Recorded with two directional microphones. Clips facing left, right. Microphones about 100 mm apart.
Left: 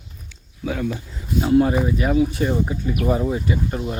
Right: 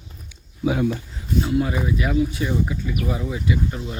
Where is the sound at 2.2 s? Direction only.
50° left (ahead or behind).